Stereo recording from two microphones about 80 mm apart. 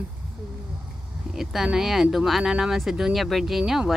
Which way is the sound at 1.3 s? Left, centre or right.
Centre.